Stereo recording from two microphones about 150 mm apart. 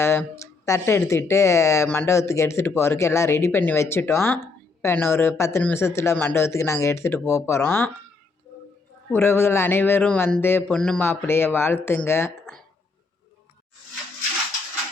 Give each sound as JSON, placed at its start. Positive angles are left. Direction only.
{"t": 0.0, "sound": "speech", "side_deg": 15}
{"t": 9.0, "sound": "speech", "side_deg": 15}